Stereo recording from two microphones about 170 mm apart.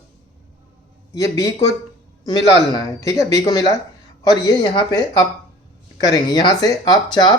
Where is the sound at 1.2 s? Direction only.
20° left (ahead or behind).